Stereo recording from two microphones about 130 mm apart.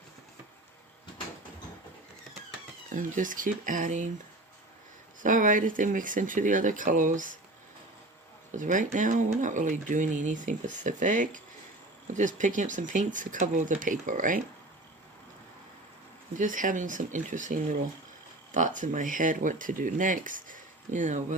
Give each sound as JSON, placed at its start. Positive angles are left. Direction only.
{"t": 2.9, "sound": "speech", "side_deg": -90}
{"t": 5.2, "sound": "speech", "side_deg": -90}
{"t": 8.5, "sound": "speech", "side_deg": -80}
{"t": 16.4, "sound": "speech", "side_deg": -90}